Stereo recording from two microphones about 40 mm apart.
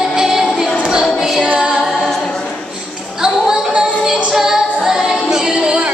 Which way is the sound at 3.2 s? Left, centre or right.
Centre.